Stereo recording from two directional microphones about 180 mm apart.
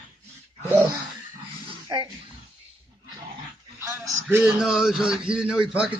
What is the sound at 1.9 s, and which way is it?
Speech, 20° right (ahead or behind).